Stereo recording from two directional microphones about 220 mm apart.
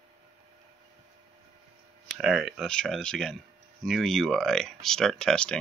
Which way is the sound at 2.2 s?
5° right (ahead or behind).